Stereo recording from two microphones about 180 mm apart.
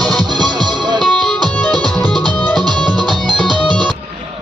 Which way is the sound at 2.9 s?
25° right (ahead or behind).